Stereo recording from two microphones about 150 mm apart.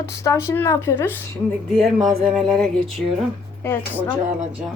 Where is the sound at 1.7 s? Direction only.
Centre (ahead or behind).